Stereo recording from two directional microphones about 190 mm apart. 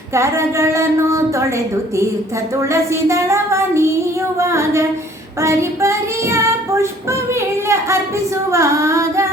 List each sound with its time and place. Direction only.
0.1 s child singing: 15° right (ahead or behind)
8.4 s female singing: 15° right (ahead or behind)